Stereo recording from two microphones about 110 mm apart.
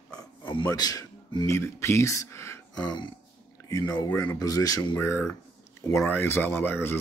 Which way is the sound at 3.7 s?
35° left (ahead or behind).